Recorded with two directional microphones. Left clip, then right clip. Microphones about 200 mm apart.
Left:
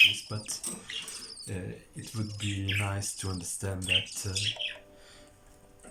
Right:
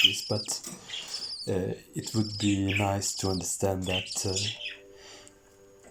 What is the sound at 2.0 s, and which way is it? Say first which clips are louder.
Speech: right 8 dB; 25° right (ahead or behind).